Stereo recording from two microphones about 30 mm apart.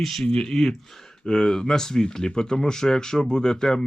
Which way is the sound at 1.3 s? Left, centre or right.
Left.